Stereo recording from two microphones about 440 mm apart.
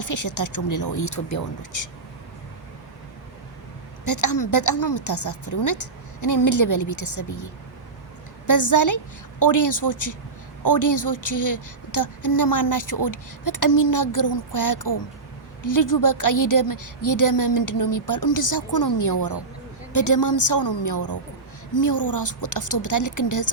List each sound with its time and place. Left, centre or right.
0.0 s a woman's voice: left
4.0 s a woman's voice: left